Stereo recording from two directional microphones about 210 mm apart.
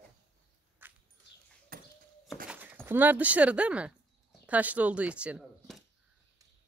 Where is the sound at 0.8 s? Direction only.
10° right (ahead or behind).